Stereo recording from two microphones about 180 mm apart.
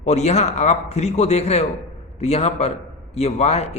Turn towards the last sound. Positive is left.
turn(degrees=35)  # may be behind; listen again after turning